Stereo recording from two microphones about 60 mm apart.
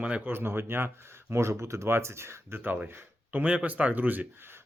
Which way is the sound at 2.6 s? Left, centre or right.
Right.